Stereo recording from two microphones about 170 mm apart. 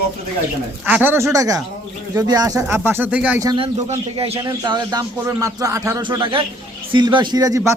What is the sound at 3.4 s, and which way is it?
Speech, 20° right (ahead or behind).